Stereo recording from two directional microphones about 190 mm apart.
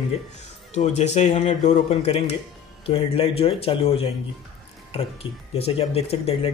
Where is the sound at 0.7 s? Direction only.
35° left (ahead or behind).